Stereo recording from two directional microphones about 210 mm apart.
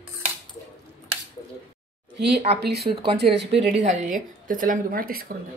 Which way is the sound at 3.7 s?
35° right (ahead or behind).